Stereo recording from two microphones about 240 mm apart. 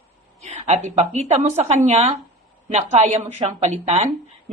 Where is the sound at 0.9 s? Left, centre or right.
Right.